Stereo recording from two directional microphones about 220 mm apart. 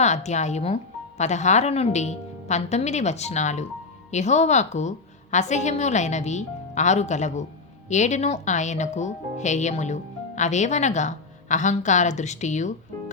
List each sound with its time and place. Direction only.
0.0 s speech: 30° left (ahead or behind)